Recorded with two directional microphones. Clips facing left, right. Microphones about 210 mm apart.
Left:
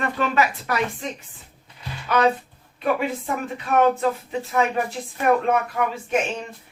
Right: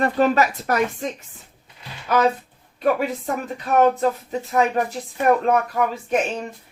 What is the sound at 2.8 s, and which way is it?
Speech, 40° right (ahead or behind).